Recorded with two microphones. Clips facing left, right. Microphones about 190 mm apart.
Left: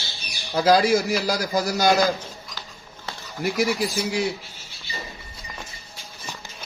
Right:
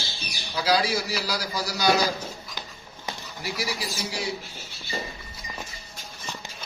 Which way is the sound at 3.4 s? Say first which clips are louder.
Left 9 dB; 50° left (ahead or behind).